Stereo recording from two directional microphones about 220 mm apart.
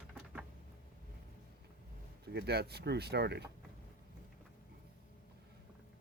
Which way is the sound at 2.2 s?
45° right (ahead or behind).